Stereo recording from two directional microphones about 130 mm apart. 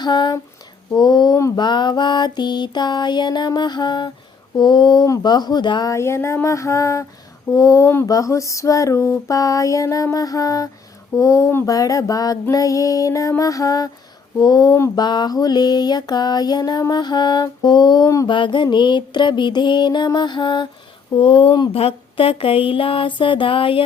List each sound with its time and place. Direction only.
0.0 s mantra: 35° left (ahead or behind)
5.9 s female singing: 20° left (ahead or behind)
14.4 s mantra: 30° left (ahead or behind)
21.7 s a sound: 50° left (ahead or behind)